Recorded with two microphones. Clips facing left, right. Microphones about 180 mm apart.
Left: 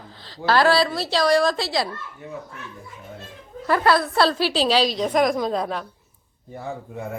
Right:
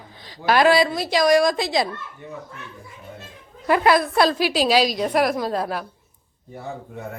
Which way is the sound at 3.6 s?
15° right (ahead or behind).